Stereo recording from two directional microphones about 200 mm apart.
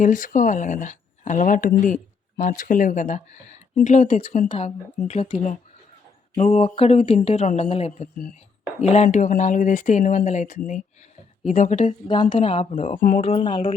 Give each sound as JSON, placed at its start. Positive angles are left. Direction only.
{"t": 0.0, "sound": "speech", "side_deg": 40}
{"t": 12.3, "sound": "speech", "side_deg": 25}
{"t": 12.8, "sound": "speech", "side_deg": 40}
{"t": 13.2, "sound": "speech", "side_deg": 25}